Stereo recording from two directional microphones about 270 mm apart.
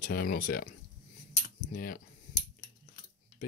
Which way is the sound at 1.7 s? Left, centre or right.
Left.